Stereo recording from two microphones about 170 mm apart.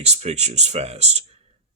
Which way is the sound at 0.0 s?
40° right (ahead or behind).